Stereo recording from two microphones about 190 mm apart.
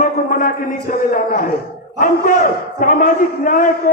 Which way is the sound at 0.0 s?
45° left (ahead or behind).